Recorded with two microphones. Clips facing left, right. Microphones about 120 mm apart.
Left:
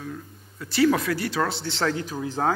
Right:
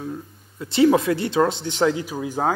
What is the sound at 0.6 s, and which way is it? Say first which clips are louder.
Speech: right 4 dB; 25° right (ahead or behind).